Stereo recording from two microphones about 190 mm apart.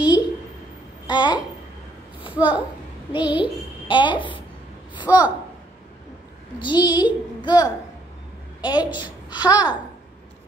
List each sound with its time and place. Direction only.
1.0 s babbling: 25° left (ahead or behind)
2.3 s a woman's voice: 5° right (ahead or behind)
3.1 s a child's voice: 25° left (ahead or behind)
5.0 s a woman's voice: 10° right (ahead or behind)
6.6 s a child's voice: 25° left (ahead or behind)